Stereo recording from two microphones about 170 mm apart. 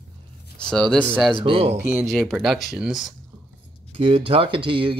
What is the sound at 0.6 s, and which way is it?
Speech, 5° left (ahead or behind).